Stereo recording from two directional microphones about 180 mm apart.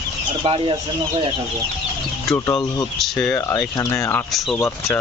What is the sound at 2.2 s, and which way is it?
Speech, 15° left (ahead or behind).